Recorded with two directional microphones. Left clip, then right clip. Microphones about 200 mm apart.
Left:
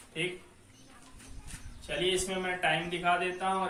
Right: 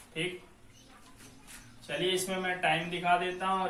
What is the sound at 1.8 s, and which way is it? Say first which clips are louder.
A man's voice: left 1 dB; 15° left (ahead or behind).